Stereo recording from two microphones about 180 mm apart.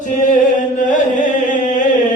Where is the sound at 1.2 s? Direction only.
45° left (ahead or behind).